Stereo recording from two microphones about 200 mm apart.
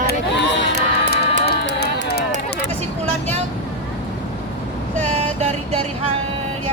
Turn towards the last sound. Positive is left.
turn(degrees=-30)  # may be behind; listen again after turning